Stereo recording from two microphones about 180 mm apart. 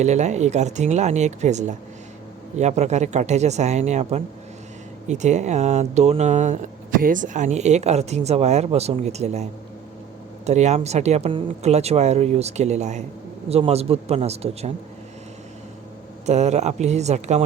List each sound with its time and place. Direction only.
0.0 s speech: 40° right (ahead or behind)
16.2 s speech: 40° right (ahead or behind)